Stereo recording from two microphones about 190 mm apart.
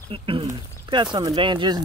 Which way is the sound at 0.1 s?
30° right (ahead or behind).